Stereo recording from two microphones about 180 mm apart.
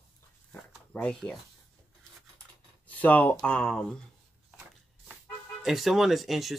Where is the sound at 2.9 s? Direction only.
10° left (ahead or behind).